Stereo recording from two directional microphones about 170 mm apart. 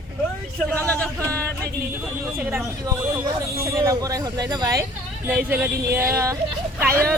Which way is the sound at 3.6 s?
20° right (ahead or behind).